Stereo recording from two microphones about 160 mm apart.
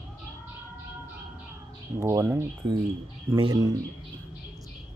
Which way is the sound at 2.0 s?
15° right (ahead or behind).